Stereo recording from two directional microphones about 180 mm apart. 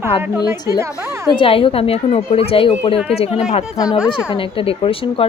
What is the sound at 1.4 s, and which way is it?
A woman's voice, 30° left (ahead or behind).